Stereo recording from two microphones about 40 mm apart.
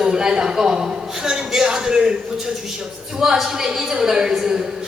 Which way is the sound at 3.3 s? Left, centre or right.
Centre.